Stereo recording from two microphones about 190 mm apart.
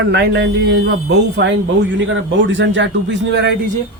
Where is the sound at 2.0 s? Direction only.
80° right.